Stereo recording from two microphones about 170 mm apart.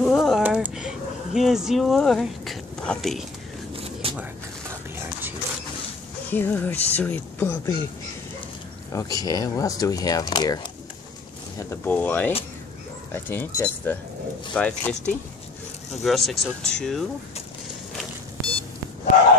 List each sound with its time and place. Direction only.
0.0 s a sound: centre (ahead or behind)
3.7 s vehicle: 35° right (ahead or behind)
4.2 s a sound: 10° right (ahead or behind)
6.3 s speech: 10° left (ahead or behind)
8.9 s speech: 20° left (ahead or behind)
11.5 s speech: 15° left (ahead or behind)